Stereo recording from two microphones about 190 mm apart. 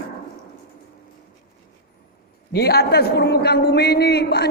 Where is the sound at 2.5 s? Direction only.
55° left (ahead or behind).